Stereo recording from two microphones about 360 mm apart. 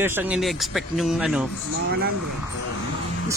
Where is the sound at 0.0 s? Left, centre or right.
Centre.